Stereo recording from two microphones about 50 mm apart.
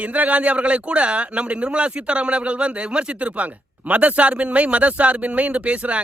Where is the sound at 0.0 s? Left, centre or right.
Right.